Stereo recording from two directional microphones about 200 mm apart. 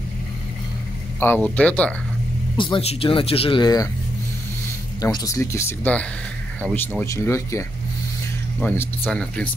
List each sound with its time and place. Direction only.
1.2 s speech: 10° left (ahead or behind)
2.5 s speech: 25° left (ahead or behind)
5.0 s speech: 15° left (ahead or behind)
8.5 s speech: 5° left (ahead or behind)